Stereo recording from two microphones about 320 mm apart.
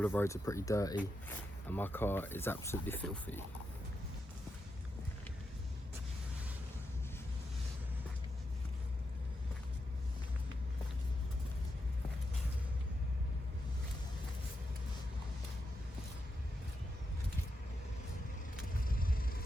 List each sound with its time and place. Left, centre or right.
0.0 s speech: centre
18.9 s vehicle: left